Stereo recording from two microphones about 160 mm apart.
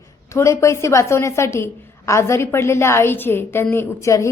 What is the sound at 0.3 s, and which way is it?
A woman's voice, 20° left (ahead or behind).